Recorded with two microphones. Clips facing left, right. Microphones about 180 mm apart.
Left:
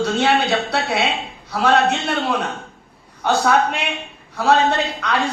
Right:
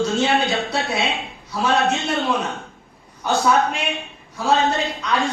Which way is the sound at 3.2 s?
60° left (ahead or behind).